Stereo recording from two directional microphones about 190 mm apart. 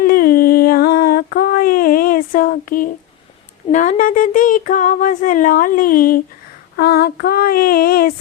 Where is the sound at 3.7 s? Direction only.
40° left (ahead or behind).